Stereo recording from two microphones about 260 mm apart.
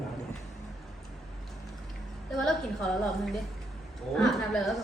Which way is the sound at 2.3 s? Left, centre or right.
Centre.